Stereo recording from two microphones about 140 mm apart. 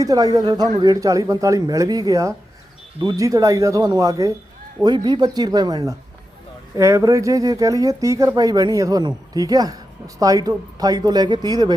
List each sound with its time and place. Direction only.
0.0 s speech: 25° right (ahead or behind)